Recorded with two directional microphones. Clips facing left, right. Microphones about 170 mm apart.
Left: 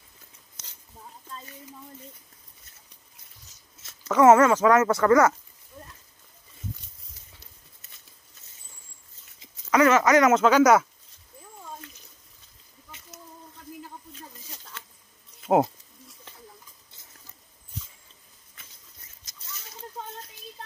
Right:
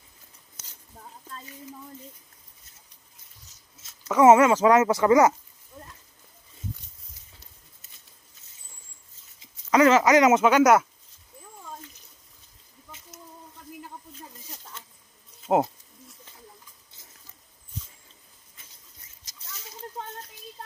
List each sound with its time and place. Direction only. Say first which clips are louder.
4.2 s speech: even; 20° right (ahead or behind)
9.7 s speech: right 1 dB; 25° right (ahead or behind); by 10.9 s 5° right (ahead or behind)
15.4 s insect: left 2 dB; centre (ahead or behind)